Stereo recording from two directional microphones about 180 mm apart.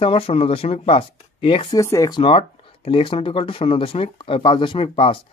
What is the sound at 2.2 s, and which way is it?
Speech, 30° left (ahead or behind).